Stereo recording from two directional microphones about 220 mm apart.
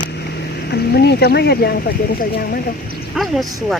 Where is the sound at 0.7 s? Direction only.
50° left (ahead or behind).